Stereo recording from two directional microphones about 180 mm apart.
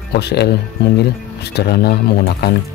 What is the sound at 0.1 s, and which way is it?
Speech, 65° left (ahead or behind).